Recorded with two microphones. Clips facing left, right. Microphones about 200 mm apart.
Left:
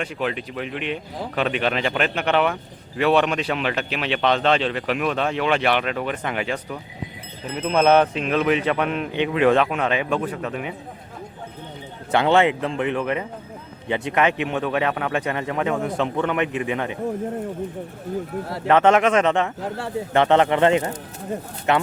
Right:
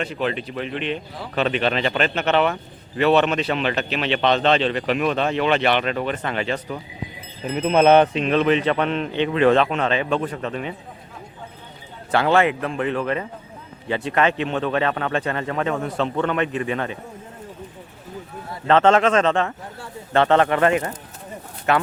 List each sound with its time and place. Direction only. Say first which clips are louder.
0.0 s speech: right 1 dB; 10° left (ahead or behind)
7.5 s speech: right 2 dB; 10° right (ahead or behind); by 10.8 s 10° left (ahead or behind)
12.1 s speech: left 1 dB; 20° left (ahead or behind)
18.7 s speech: even; 15° left (ahead or behind)
19.5 s a man's voice: left 9 dB; 85° left
20.1 s speech: even; 15° left (ahead or behind)